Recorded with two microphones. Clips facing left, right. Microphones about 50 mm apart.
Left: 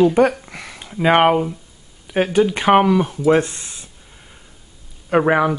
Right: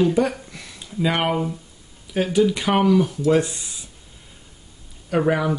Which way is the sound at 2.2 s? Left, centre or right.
Left.